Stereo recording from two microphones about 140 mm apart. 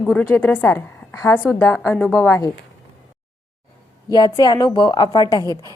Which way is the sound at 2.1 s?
20° left (ahead or behind).